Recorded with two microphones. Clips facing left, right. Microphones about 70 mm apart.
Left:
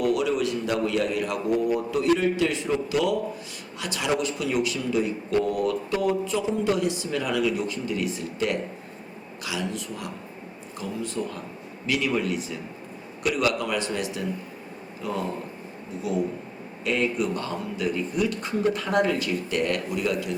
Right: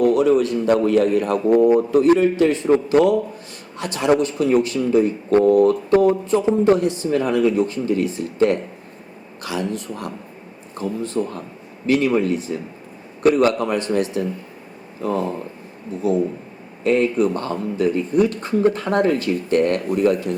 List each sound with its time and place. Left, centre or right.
0.0 s speech: right
16.8 s speech: right